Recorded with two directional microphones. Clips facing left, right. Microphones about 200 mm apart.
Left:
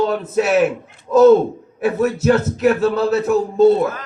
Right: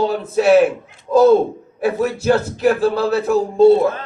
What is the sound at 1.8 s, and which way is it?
A man's voice, 30° right (ahead or behind).